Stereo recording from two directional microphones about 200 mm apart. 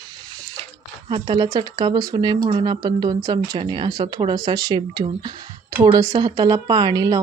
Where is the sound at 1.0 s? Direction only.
25° right (ahead or behind).